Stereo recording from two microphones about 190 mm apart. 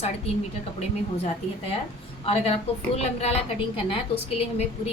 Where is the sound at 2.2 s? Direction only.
30° left (ahead or behind).